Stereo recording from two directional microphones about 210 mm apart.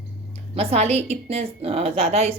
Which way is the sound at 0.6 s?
30° right (ahead or behind).